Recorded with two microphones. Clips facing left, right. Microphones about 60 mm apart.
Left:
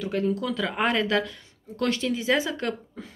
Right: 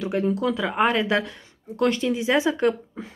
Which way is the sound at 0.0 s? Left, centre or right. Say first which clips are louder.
Right 3 dB; right.